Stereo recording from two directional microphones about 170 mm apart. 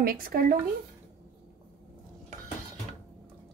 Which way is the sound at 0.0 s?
60° right (ahead or behind).